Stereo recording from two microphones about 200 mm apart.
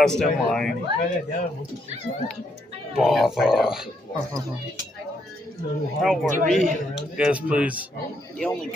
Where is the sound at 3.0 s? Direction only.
Centre (ahead or behind).